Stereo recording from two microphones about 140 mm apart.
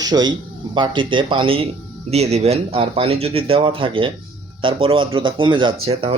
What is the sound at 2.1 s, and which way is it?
Speech, 50° right (ahead or behind).